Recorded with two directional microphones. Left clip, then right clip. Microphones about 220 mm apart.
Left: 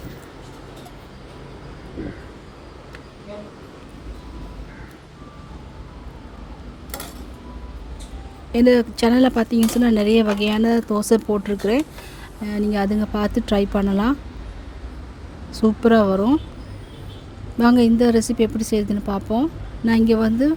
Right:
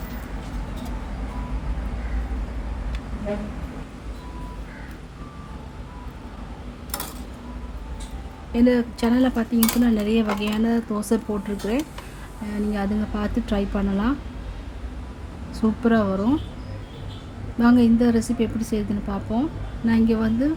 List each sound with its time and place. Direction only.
8.5 s speech: 40° left (ahead or behind)
15.5 s speech: 40° left (ahead or behind)
17.6 s speech: 40° left (ahead or behind)